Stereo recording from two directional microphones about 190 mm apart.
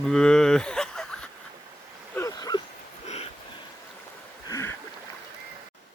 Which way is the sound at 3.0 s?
35° left (ahead or behind).